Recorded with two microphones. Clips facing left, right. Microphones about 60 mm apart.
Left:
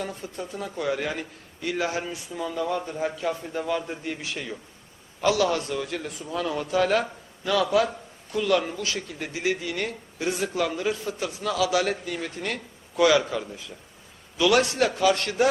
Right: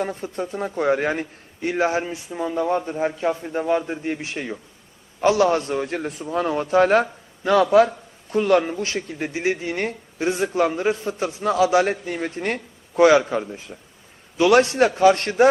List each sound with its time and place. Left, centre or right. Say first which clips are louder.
0.0 s a man's voice: right 7 dB; right